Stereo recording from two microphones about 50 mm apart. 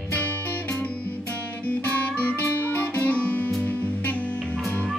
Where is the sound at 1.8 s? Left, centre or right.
Left.